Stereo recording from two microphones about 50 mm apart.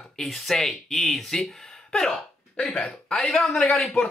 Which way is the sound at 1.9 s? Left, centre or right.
Centre.